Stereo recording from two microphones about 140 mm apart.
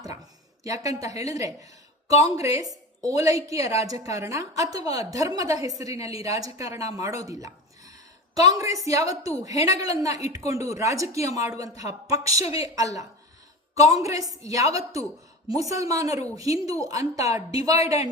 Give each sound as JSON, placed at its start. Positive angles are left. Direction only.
{"t": 0.6, "sound": "a woman's voice", "side_deg": -25}